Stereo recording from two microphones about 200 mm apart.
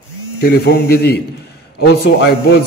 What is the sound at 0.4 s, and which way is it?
A man's voice, 55° left (ahead or behind).